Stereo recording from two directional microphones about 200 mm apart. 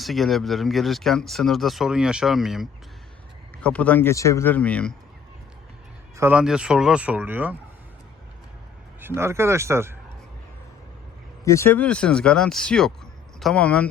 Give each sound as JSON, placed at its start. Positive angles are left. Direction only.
{"t": 0.0, "sound": "speech", "side_deg": 0}
{"t": 6.1, "sound": "speech", "side_deg": -10}
{"t": 9.0, "sound": "speech", "side_deg": -10}
{"t": 11.4, "sound": "speech", "side_deg": 15}